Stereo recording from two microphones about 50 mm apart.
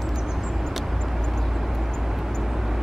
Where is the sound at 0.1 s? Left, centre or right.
Centre.